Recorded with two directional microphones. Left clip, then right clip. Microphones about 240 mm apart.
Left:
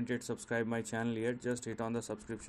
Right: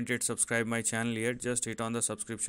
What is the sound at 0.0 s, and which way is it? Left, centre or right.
Speech, right.